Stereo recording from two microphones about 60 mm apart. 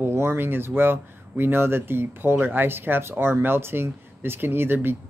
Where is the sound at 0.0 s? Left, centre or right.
Right.